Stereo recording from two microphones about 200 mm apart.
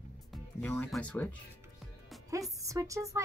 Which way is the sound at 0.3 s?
5° left (ahead or behind).